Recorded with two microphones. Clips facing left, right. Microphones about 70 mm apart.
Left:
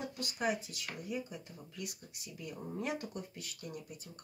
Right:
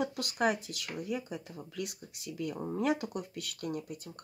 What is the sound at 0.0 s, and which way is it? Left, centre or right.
Speech, right.